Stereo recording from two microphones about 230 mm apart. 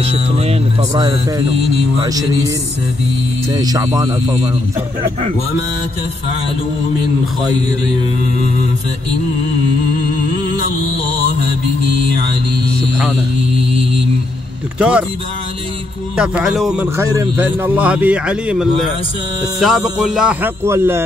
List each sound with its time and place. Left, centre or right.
0.0 s a man's voice: right
3.5 s a man's voice: centre
14.8 s speech: centre
16.2 s speech: centre
17.0 s a man's voice: centre